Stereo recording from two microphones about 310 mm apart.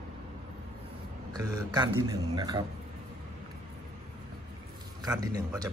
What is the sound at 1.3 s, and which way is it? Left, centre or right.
A man's voice, centre.